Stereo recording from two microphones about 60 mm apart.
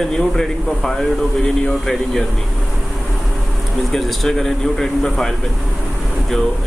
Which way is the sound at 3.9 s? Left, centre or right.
Centre.